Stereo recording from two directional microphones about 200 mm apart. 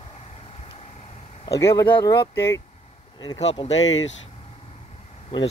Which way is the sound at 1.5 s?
15° left (ahead or behind).